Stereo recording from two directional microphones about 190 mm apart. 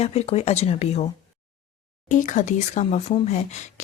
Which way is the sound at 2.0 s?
45° left (ahead or behind).